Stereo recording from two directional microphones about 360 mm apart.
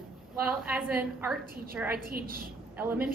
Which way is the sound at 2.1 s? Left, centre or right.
Right.